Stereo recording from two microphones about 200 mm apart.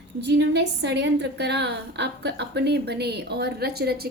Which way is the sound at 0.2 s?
60° right (ahead or behind).